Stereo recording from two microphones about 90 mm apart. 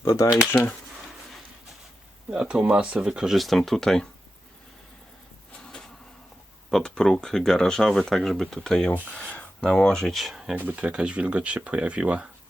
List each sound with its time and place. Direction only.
0.0 s speech: 40° left (ahead or behind)
2.3 s speech: 10° right (ahead or behind); by 4.1 s 5° left (ahead or behind)
6.7 s speech: 5° left (ahead or behind)
10.6 s speech: 15° right (ahead or behind)